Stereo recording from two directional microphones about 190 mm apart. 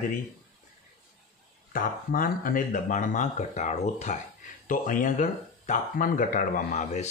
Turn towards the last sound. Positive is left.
turn(degrees=40)  # may be behind; listen again after turning